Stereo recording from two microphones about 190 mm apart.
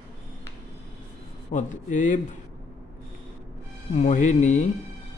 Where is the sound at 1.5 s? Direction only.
40° left (ahead or behind).